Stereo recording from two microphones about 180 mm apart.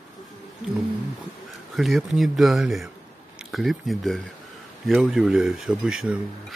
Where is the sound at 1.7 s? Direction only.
Centre (ahead or behind).